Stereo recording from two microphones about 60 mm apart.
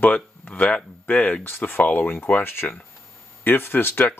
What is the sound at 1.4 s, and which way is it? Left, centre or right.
Speech, left.